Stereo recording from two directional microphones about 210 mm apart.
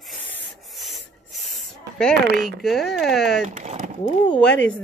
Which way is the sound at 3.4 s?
35° right (ahead or behind).